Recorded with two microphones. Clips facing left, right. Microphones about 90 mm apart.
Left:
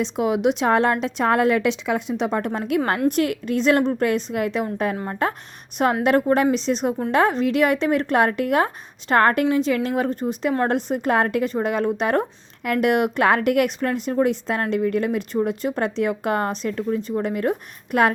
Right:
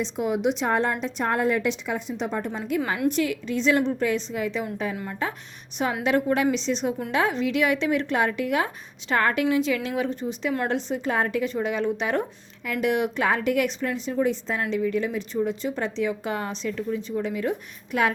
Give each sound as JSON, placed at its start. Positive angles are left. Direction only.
{"t": 0.0, "sound": "a woman's voice", "side_deg": 90}
{"t": 3.1, "sound": "a woman's voice", "side_deg": 55}
{"t": 4.9, "sound": "a woman's voice", "side_deg": 45}
{"t": 11.4, "sound": "a woman's voice", "side_deg": 45}